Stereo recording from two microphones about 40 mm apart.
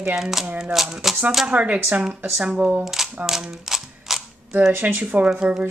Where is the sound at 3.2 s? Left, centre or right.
Centre.